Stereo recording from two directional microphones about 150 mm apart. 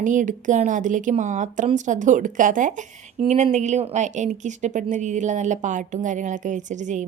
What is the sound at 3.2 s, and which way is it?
A woman's voice, 50° right (ahead or behind).